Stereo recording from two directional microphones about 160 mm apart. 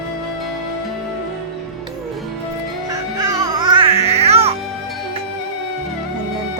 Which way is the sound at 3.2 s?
20° right (ahead or behind).